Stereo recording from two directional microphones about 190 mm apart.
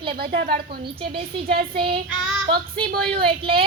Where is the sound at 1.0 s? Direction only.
25° right (ahead or behind).